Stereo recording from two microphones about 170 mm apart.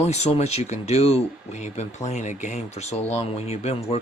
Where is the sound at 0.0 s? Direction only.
40° left (ahead or behind).